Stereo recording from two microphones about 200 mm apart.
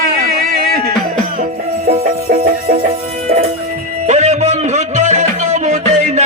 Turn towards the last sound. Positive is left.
turn(degrees=-35)  # may be behind; listen again after turning